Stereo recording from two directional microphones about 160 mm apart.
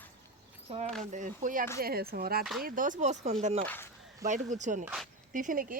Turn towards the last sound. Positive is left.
turn(degrees=-60)  # may be behind; listen again after turning